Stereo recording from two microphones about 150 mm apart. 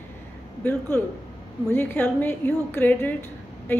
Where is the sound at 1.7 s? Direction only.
15° left (ahead or behind).